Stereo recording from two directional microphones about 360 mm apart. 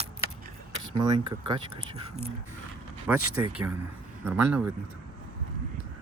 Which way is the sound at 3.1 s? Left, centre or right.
Centre.